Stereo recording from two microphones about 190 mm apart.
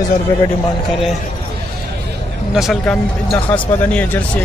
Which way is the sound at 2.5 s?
Centre (ahead or behind).